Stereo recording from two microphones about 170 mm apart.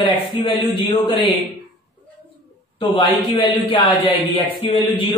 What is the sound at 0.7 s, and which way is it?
Speech, 30° left (ahead or behind).